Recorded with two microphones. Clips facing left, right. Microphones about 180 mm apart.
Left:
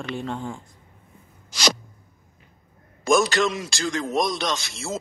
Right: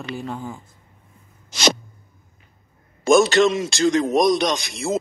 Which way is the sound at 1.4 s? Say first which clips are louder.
Right 4 dB; 25° right (ahead or behind).